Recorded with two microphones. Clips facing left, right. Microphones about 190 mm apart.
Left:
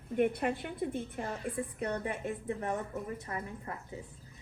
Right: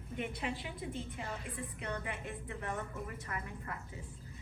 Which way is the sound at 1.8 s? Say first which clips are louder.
Left 5 dB; 40° left (ahead or behind).